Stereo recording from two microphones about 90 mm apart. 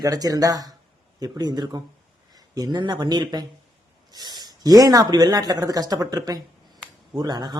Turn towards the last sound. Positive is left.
turn(degrees=-50)  # may be behind; listen again after turning